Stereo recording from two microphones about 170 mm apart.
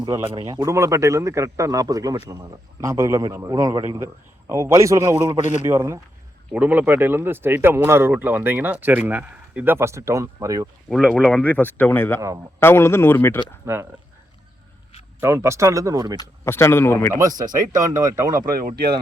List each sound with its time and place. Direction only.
0.3 s speech: 20° right (ahead or behind)
10.8 s speech: centre (ahead or behind)
13.7 s speech: 15° right (ahead or behind)
15.2 s speech: 15° right (ahead or behind)
16.1 s speech: 15° left (ahead or behind)
17.2 s speech: 20° right (ahead or behind)
18.5 s speech: 65° right (ahead or behind)